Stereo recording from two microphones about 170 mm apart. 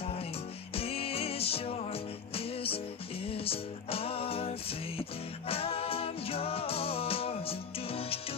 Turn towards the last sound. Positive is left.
turn(degrees=35)  # may be behind; listen again after turning